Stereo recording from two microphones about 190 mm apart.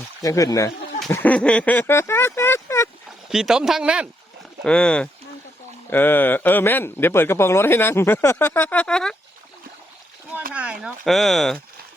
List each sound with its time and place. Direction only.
0.2 s speech: 15° left (ahead or behind)
3.2 s speech: 5° right (ahead or behind)
10.5 s speech: 5° right (ahead or behind)